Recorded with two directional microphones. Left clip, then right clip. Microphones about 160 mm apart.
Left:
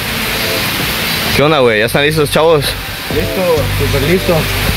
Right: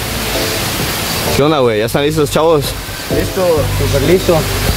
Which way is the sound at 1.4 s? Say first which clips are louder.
Left 2 dB; 5° right (ahead or behind).